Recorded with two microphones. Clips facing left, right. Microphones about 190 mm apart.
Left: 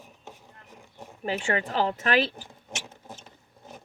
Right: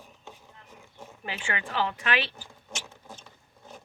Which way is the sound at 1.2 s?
40° left (ahead or behind).